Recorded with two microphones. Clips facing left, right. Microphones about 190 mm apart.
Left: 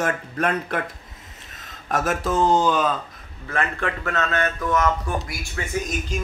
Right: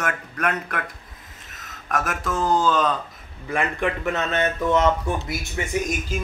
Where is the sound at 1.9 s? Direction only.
30° left (ahead or behind).